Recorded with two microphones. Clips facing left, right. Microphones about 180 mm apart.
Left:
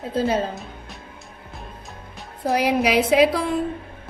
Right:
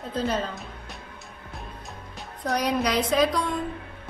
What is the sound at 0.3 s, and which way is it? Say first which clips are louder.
Speech: left 5 dB; 45° left (ahead or behind).